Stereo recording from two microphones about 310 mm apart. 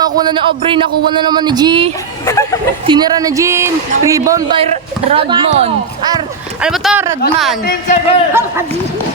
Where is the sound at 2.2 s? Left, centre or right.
Centre.